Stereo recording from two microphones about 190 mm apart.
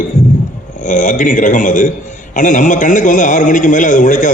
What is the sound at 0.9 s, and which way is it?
A man's voice, 40° left (ahead or behind).